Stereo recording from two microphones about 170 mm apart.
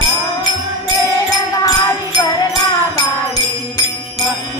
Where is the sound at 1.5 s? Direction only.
20° left (ahead or behind).